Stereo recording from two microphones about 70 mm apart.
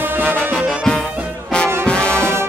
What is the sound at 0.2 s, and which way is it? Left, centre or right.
Music, right.